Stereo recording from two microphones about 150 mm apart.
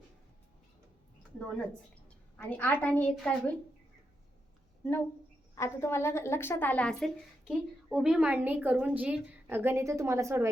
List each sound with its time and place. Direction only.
1.4 s a woman's voice: 5° left (ahead or behind)
5.5 s a woman's voice: 15° left (ahead or behind); by 10.5 s 20° right (ahead or behind)